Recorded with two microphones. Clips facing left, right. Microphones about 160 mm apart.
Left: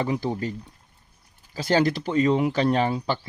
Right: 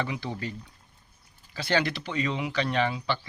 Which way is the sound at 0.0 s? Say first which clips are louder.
Left 6 dB; 40° left (ahead or behind).